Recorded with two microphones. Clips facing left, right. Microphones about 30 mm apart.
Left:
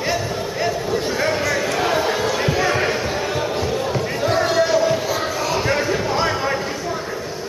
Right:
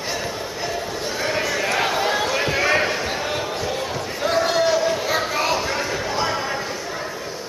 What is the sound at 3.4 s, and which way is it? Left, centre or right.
Basketball bounce, centre.